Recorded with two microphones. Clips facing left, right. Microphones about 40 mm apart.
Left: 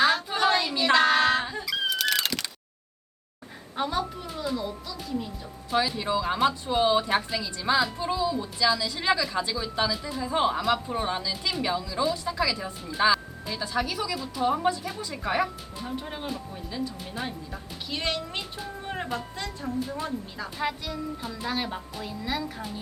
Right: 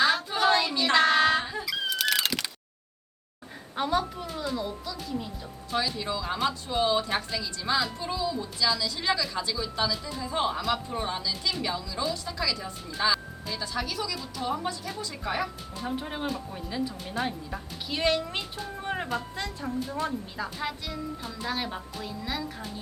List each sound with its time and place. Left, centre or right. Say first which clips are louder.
0.0 s child singing: left 1 dB; centre
3.8 s speech: right 1 dB; centre
5.7 s a woman's voice: left 4 dB; centre
15.8 s speech: right 2 dB; centre
18.8 s music: right 2 dB; centre
19.0 s speech: right 1 dB; centre
20.6 s speech: left 3 dB; centre